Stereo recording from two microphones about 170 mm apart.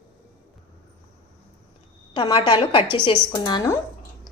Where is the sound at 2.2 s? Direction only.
25° left (ahead or behind).